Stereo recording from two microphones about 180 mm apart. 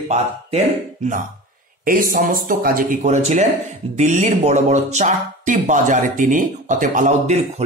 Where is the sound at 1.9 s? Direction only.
50° right (ahead or behind).